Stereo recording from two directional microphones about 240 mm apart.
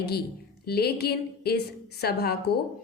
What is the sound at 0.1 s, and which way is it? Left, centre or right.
A woman's voice, left.